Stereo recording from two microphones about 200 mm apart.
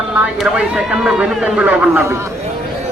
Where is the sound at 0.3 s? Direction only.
5° right (ahead or behind).